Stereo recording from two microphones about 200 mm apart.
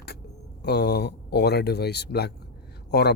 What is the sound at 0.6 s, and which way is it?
Speech, 55° left (ahead or behind).